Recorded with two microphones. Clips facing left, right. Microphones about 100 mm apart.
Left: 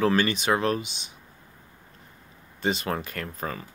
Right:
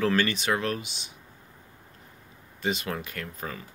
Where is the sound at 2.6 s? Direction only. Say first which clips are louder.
Left 3 dB; 40° left (ahead or behind).